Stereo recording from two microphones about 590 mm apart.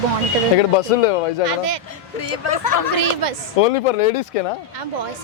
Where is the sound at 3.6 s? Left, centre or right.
Left.